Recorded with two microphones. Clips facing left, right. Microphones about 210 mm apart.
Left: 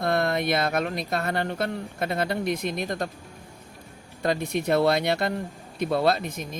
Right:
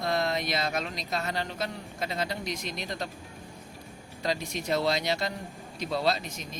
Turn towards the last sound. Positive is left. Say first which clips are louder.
# left 5 dB
turn(degrees=55)  # may be behind; listen again after turning